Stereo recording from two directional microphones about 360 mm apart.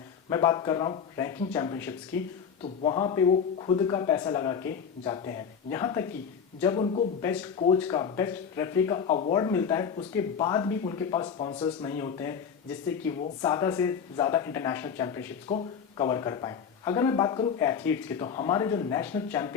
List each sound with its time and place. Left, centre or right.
0.3 s speech: centre